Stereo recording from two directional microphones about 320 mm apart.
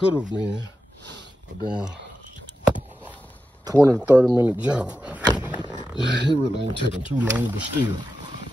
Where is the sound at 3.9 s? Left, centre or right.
Centre.